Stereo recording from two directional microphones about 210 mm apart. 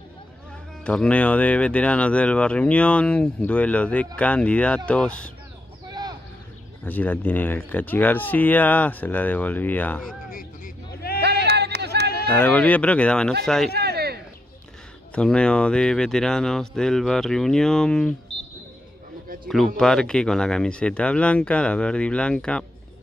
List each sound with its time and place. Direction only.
0.8 s speech: 5° left (ahead or behind)
5.9 s vehicle: 20° right (ahead or behind)
6.8 s speech: 10° left (ahead or behind)
10.3 s vehicle: 45° left (ahead or behind)
11.2 s a sound: 50° right (ahead or behind)
12.3 s speech: 10° left (ahead or behind)
13.7 s a sound: 50° right (ahead or behind)
15.1 s speech: 5° left (ahead or behind)
19.4 s speech: centre (ahead or behind)